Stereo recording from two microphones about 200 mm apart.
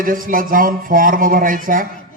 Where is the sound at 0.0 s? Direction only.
45° right (ahead or behind).